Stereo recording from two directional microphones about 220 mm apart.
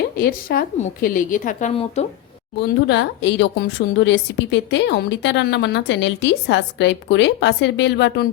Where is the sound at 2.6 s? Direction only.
50° left (ahead or behind).